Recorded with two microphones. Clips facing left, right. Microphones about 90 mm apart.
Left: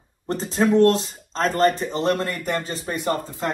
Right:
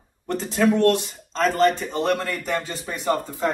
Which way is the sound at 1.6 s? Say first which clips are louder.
Left 2 dB; 40° left (ahead or behind).